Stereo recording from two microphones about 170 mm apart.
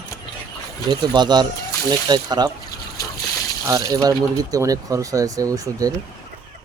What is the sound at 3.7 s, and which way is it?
Speech, 20° right (ahead or behind).